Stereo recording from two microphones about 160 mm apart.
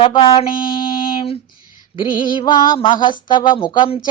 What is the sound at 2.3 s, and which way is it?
A woman's voice, 30° left (ahead or behind).